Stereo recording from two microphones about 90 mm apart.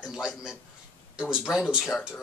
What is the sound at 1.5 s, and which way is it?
Speech, 5° right (ahead or behind).